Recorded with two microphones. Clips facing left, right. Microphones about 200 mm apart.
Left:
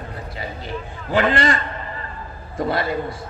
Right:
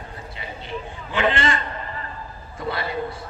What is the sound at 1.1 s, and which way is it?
Speech, 40° left (ahead or behind).